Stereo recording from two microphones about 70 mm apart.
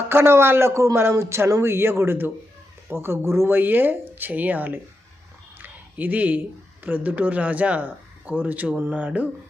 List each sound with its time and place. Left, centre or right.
0.1 s a man's voice: right
5.5 s a sound: right
6.8 s speech: right